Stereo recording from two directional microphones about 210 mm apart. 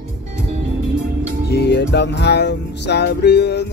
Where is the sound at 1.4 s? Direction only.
50° left (ahead or behind).